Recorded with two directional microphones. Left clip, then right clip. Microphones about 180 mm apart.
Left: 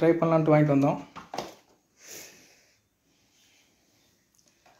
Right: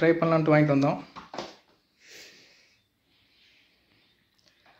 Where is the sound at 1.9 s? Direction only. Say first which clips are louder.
Left 3 dB; 70° left (ahead or behind).